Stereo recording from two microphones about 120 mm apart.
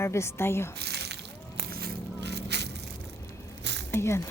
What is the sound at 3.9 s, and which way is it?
Speech, 20° left (ahead or behind).